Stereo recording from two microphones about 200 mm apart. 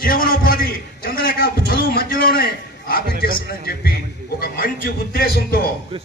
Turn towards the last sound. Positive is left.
turn(degrees=50)  # may be behind; listen again after turning